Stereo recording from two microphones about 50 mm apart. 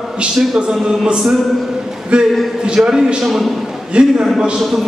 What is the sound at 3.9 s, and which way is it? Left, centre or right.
Speech, right.